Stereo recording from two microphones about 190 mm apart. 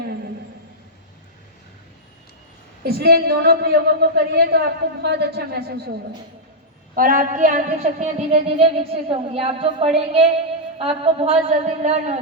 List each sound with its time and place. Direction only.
2.8 s a woman's voice: 55° right (ahead or behind)
6.9 s a woman's voice: 45° right (ahead or behind)